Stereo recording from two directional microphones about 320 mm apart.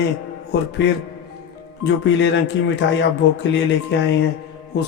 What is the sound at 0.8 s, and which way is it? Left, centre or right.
Speech, left.